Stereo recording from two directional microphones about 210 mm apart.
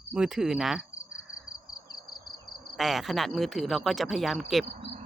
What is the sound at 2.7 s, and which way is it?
Speech, centre (ahead or behind).